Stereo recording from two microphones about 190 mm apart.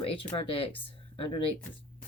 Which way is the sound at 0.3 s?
30° left (ahead or behind).